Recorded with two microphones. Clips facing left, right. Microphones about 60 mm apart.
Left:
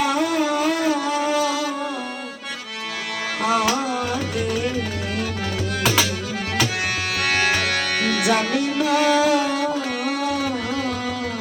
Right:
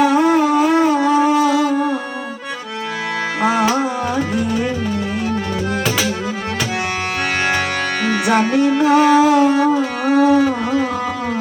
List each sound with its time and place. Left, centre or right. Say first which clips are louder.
0.0 s music: right 7 dB; right
3.4 s music: right 4 dB; right
8.0 s music: right 5 dB; right